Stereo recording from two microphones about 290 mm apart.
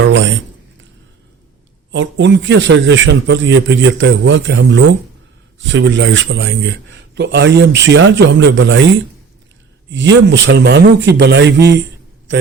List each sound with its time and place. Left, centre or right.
0.0 s a sound: right
1.9 s speech: right
9.9 s speech: right